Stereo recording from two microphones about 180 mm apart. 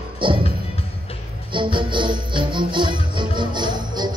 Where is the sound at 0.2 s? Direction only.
30° right (ahead or behind).